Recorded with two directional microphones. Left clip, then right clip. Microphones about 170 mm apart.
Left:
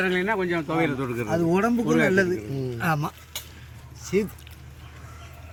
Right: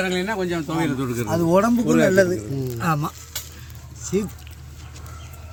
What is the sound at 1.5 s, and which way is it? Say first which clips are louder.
Speech: right 6 dB; 55° right (ahead or behind).